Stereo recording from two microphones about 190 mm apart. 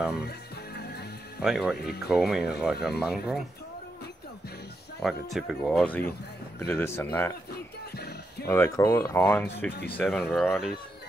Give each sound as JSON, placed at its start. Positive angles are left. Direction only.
{"t": 0.7, "sound": "music", "side_deg": 60}
{"t": 1.4, "sound": "speech", "side_deg": 0}
{"t": 1.8, "sound": "speech", "side_deg": 60}
{"t": 2.0, "sound": "speech", "side_deg": -5}
{"t": 5.0, "sound": "speech", "side_deg": 0}
{"t": 7.5, "sound": "music", "side_deg": 55}
{"t": 8.5, "sound": "speech", "side_deg": 15}
{"t": 9.7, "sound": "speech", "side_deg": 60}
{"t": 9.9, "sound": "speech", "side_deg": 0}